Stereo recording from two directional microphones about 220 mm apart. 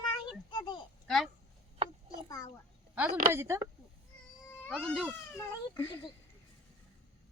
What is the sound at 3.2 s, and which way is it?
Speech, 10° right (ahead or behind).